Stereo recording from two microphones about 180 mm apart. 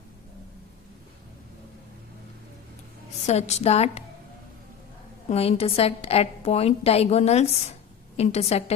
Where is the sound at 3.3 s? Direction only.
40° left (ahead or behind).